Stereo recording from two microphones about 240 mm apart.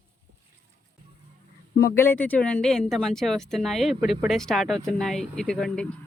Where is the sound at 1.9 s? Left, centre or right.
Centre.